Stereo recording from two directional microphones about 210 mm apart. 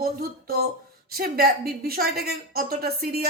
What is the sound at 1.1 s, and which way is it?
A woman's voice, 45° right (ahead or behind).